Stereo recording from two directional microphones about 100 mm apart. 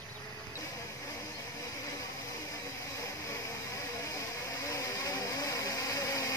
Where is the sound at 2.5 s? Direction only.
30° left (ahead or behind).